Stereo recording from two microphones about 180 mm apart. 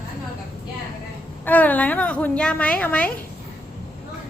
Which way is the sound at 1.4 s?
10° left (ahead or behind).